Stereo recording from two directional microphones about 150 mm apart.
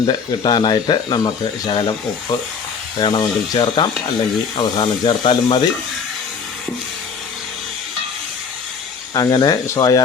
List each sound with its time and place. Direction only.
0.1 s speech: 30° left (ahead or behind)
3.0 s speech: 25° left (ahead or behind)
9.1 s speech: 25° left (ahead or behind)